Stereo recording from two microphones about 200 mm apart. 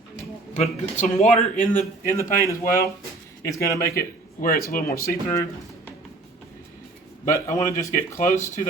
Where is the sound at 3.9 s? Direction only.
50° left (ahead or behind).